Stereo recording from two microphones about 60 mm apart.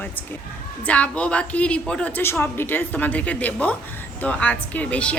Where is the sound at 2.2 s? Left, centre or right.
Left.